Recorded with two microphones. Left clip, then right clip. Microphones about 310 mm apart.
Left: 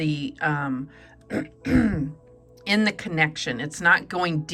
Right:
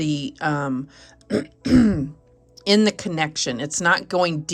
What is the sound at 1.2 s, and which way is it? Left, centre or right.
Throat clearing, centre.